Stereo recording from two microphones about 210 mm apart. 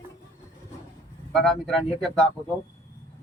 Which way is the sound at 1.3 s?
Centre (ahead or behind).